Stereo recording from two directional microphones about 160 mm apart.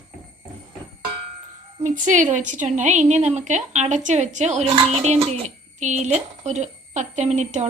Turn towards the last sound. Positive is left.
turn(degrees=-45)  # may be behind; listen again after turning